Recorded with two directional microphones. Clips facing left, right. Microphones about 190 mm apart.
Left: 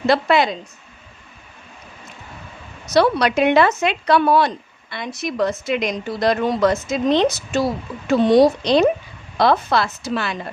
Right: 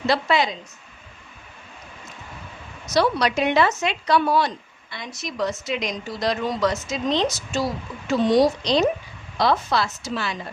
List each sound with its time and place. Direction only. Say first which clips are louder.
0.1 s speech: left 5 dB; 55° left (ahead or behind)
2.8 s speech: left 4 dB; 60° left (ahead or behind)